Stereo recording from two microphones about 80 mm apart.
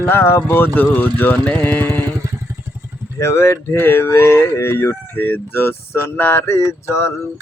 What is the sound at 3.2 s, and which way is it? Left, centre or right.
Speech, left.